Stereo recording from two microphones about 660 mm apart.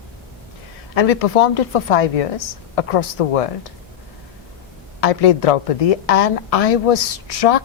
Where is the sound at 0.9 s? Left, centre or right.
Left.